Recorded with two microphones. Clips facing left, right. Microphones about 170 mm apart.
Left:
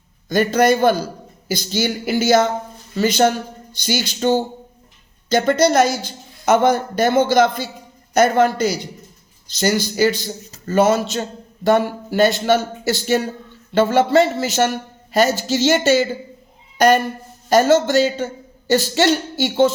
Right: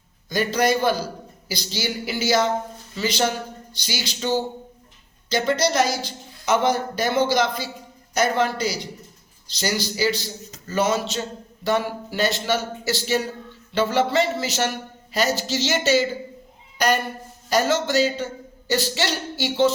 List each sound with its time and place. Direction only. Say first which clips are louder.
0.3 s a man's voice: left 6 dB; 50° left (ahead or behind)